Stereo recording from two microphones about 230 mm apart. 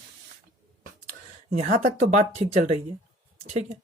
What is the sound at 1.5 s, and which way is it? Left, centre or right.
Speech, right.